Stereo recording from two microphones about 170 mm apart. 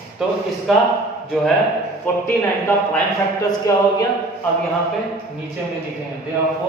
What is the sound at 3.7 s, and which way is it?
Speech, 20° left (ahead or behind).